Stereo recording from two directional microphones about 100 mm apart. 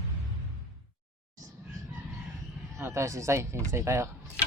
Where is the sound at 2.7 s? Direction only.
25° right (ahead or behind).